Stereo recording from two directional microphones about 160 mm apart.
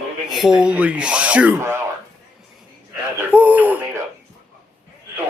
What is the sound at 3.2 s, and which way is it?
Gasp, 10° right (ahead or behind).